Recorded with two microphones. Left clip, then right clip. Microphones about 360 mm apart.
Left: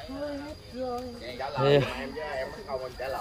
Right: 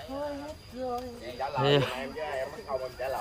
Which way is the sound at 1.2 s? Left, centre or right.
Right.